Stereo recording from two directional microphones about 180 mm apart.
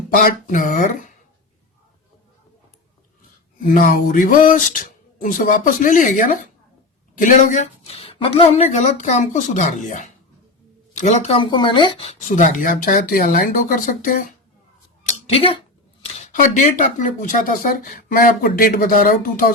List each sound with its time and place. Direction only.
0.2 s speech: 50° left (ahead or behind)
3.8 s a woman's voice: 45° left (ahead or behind); by 12.1 s 30° left (ahead or behind)
12.4 s speech: 45° left (ahead or behind)
15.3 s a woman's voice: 30° left (ahead or behind)
16.1 s speech: 45° left (ahead or behind)